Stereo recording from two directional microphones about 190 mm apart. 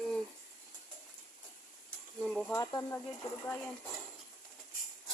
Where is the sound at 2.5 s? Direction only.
20° left (ahead or behind).